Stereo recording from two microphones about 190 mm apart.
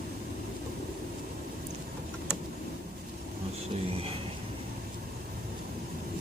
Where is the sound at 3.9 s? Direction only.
30° right (ahead or behind).